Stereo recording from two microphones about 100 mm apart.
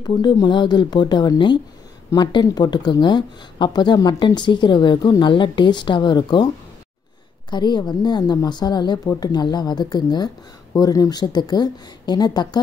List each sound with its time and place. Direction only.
0.0 s a woman's voice: 45° left (ahead or behind)
7.5 s a woman's voice: 45° left (ahead or behind)